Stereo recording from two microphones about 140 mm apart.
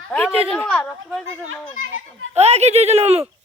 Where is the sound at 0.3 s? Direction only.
45° right (ahead or behind).